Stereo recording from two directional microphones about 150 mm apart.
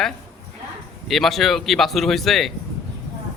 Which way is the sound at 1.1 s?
Centre (ahead or behind).